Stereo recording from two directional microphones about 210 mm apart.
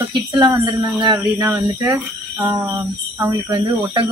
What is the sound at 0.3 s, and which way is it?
Speech, 20° right (ahead or behind).